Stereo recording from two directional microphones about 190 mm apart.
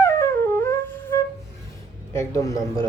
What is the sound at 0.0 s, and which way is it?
Flute, 15° left (ahead or behind).